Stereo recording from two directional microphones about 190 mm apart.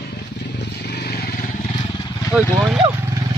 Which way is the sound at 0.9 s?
60° left (ahead or behind).